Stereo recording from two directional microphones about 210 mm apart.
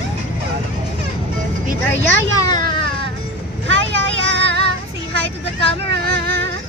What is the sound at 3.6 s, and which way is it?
Vehicle, 60° right (ahead or behind).